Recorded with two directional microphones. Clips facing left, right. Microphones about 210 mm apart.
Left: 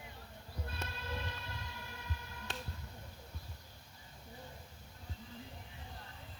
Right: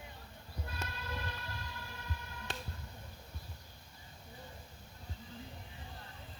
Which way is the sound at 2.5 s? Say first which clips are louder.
Right 1 dB; centre (ahead or behind).